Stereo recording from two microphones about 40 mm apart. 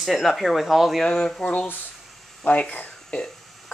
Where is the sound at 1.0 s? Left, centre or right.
Centre.